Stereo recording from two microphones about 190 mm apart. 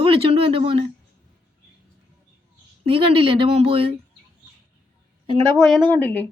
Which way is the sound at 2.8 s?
30° right (ahead or behind).